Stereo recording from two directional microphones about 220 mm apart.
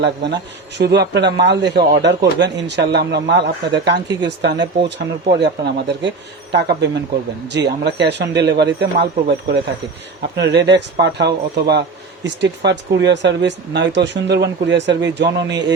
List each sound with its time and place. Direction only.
0.0 s a man's voice: 50° right (ahead or behind)
4.5 s speech: 20° right (ahead or behind)
4.9 s a man's voice: 50° right (ahead or behind)